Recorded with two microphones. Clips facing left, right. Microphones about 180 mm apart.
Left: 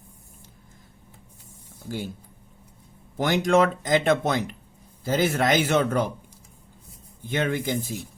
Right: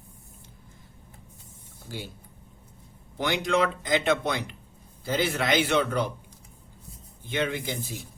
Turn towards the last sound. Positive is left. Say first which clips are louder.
# left 5 dB
turn(degrees=45)  # may be behind; listen again after turning